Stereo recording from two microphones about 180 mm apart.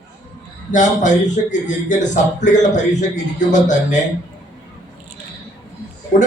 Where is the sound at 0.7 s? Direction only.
45° left (ahead or behind).